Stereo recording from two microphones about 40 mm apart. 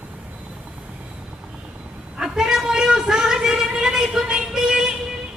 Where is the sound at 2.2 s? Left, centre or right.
Centre.